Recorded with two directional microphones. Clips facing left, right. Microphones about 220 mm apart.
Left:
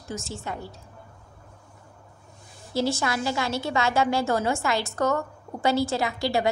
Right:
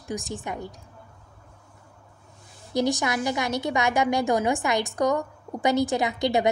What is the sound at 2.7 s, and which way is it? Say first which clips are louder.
A woman's voice: right 1 dB; 15° right (ahead or behind).